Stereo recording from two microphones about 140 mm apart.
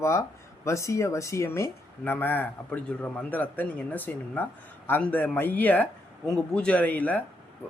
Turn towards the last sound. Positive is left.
turn(degrees=10)  # may be behind; listen again after turning